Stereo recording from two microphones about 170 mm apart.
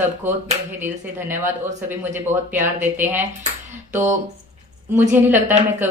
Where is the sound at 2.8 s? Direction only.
10° right (ahead or behind).